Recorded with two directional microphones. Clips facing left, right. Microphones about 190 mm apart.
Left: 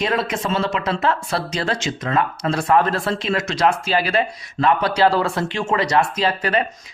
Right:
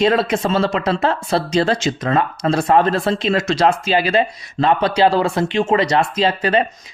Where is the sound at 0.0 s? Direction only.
30° right (ahead or behind).